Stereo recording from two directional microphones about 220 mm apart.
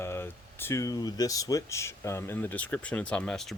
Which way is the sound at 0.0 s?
10° left (ahead or behind).